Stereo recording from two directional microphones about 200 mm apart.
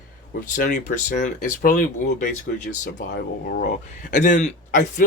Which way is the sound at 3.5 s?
45° left (ahead or behind).